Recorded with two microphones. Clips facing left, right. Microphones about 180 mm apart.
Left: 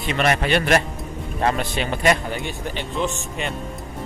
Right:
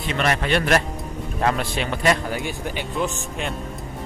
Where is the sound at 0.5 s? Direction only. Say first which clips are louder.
Left 1 dB; centre (ahead or behind).